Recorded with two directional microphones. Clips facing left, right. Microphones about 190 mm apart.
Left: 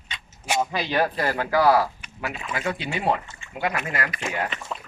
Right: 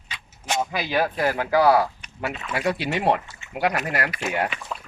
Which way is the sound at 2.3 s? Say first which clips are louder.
Even; 5° left (ahead or behind).